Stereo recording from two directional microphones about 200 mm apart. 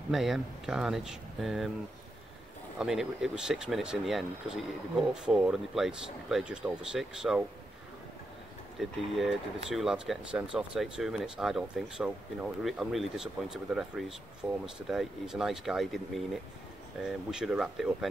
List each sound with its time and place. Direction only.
0.1 s speech: centre (ahead or behind)
2.8 s speech: centre (ahead or behind)
8.7 s speech: centre (ahead or behind)